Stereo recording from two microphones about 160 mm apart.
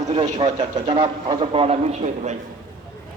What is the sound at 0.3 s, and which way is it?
A man's voice, 30° right (ahead or behind).